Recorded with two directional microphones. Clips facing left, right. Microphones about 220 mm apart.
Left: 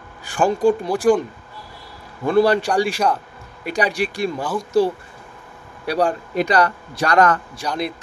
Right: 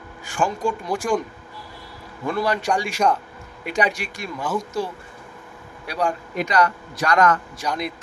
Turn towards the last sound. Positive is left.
turn(degrees=35)  # may be behind; listen again after turning